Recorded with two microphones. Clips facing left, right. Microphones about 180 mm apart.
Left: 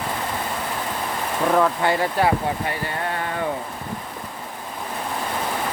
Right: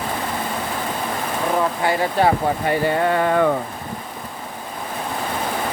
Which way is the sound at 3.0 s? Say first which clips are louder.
Right 8 dB; 90° right.